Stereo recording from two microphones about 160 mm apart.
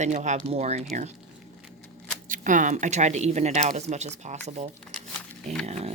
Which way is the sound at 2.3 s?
55° right (ahead or behind).